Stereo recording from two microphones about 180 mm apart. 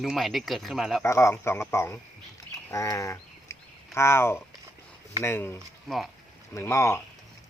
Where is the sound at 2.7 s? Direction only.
15° left (ahead or behind).